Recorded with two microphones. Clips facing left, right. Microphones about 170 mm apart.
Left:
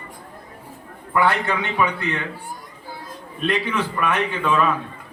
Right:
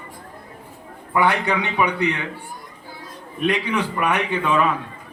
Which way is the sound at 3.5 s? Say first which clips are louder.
Even; 15° right (ahead or behind).